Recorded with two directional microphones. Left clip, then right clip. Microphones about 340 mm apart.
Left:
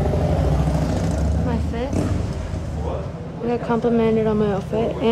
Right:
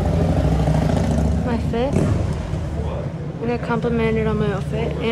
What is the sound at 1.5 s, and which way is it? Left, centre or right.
Speech, centre.